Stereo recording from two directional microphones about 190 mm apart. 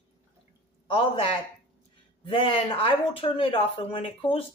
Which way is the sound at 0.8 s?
25° left (ahead or behind).